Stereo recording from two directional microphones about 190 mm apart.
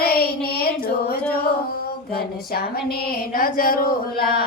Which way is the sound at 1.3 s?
55° left (ahead or behind).